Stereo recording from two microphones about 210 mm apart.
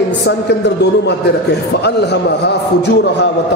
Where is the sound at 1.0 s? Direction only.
50° left (ahead or behind).